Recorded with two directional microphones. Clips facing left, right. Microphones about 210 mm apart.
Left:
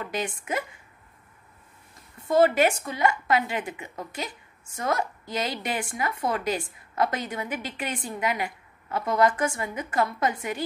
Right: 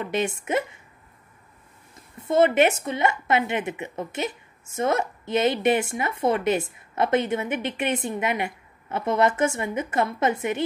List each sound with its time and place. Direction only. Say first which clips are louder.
0.0 s speech: right 5 dB; 25° right (ahead or behind)
2.1 s speech: right 2 dB; 25° right (ahead or behind)